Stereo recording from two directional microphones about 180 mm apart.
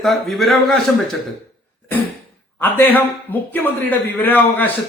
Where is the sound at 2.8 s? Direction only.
10° left (ahead or behind).